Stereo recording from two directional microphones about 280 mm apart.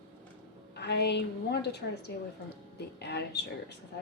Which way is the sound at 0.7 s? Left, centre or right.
Left.